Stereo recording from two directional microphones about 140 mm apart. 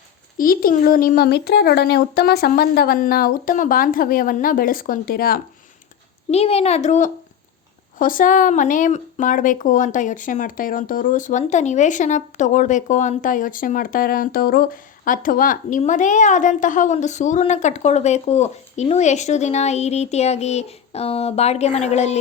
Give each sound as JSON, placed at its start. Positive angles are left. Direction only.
{"t": 0.3, "sound": "speech", "side_deg": 90}
{"t": 6.3, "sound": "a woman's voice", "side_deg": 45}
{"t": 7.9, "sound": "speech", "side_deg": 75}
{"t": 15.8, "sound": "a woman's voice", "side_deg": 65}